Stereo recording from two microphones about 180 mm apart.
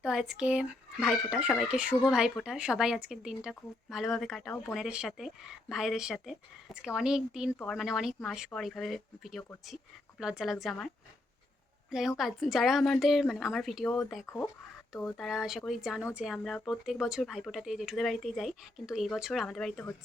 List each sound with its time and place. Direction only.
0.0 s speech: 5° right (ahead or behind)
14.3 s speech: 20° left (ahead or behind)
14.9 s speech: 5° left (ahead or behind)